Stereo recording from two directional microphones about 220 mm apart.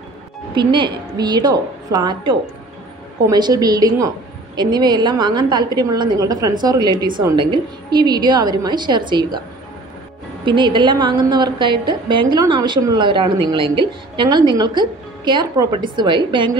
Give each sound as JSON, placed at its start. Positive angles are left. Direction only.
{"t": 0.6, "sound": "a woman's voice", "side_deg": -20}
{"t": 10.4, "sound": "a woman's voice", "side_deg": -20}